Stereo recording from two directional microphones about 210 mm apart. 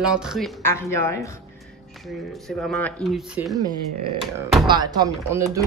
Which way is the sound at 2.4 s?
Centre (ahead or behind).